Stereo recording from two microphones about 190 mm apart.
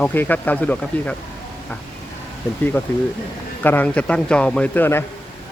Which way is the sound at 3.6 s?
10° left (ahead or behind).